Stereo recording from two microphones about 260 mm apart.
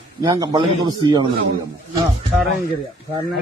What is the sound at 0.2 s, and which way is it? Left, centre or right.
Speech, centre.